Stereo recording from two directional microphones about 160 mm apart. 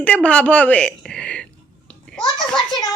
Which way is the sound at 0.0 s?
10° left (ahead or behind).